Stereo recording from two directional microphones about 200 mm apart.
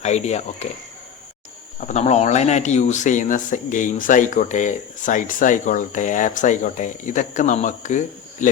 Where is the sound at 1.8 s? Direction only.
35° left (ahead or behind).